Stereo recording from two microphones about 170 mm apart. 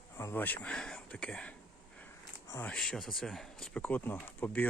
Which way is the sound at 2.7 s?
Centre (ahead or behind).